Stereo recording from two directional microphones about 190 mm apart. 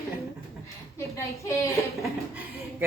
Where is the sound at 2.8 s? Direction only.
10° right (ahead or behind).